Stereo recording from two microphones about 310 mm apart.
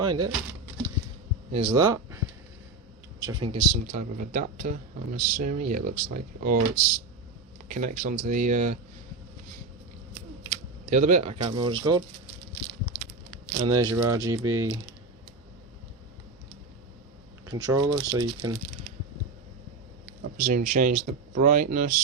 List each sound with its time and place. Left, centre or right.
0.0 s speech: centre
1.5 s speech: centre
10.5 s speech: right
13.6 s speech: centre
17.4 s speech: centre
20.3 s speech: right